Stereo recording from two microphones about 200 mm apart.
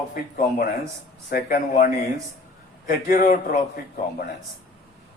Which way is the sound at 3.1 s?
45° left (ahead or behind).